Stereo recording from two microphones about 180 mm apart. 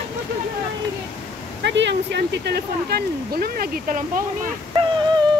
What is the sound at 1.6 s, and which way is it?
Speech, 75° right (ahead or behind).